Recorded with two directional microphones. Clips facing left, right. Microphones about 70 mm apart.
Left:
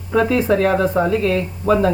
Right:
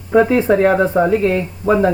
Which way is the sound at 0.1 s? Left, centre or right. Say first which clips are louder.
Right 4 dB; right.